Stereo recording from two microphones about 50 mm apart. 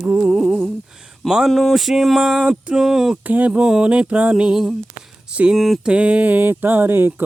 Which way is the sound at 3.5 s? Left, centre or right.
Centre.